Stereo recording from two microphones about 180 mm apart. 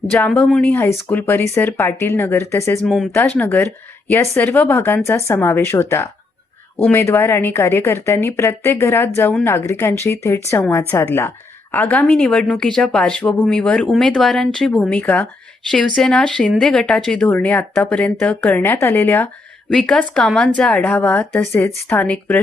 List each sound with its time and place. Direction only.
0.1 s a woman's voice: 10° left (ahead or behind)
2.8 s a woman's voice: centre (ahead or behind)
6.8 s a woman's voice: 10° left (ahead or behind)